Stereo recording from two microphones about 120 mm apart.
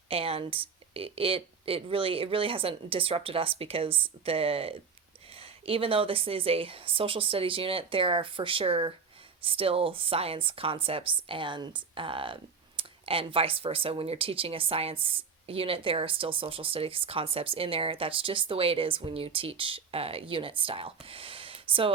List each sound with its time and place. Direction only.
0.1 s speech: 55° right (ahead or behind)